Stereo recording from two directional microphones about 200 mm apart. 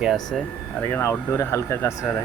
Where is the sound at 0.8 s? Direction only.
15° left (ahead or behind).